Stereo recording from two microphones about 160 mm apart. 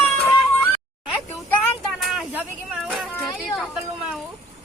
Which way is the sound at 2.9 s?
Centre (ahead or behind).